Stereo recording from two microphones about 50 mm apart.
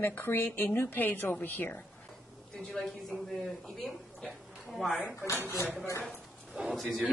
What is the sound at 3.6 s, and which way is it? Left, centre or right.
A woman's voice, centre.